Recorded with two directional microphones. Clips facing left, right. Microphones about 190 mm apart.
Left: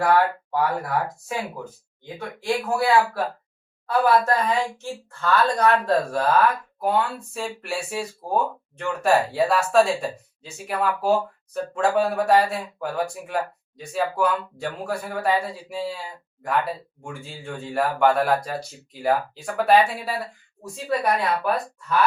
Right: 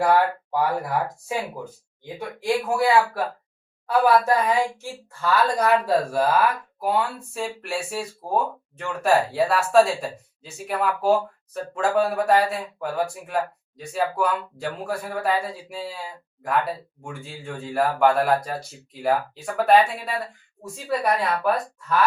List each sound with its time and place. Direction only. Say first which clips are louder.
0.0 s speech: even; 15° right (ahead or behind)
2.1 s speech: right 2 dB; 15° right (ahead or behind); by 21.5 s centre (ahead or behind)